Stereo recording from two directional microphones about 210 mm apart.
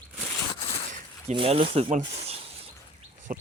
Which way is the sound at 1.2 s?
30° right (ahead or behind).